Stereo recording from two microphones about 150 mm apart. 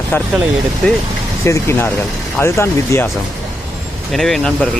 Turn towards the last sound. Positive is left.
turn(degrees=0)  # may be behind; listen again after turning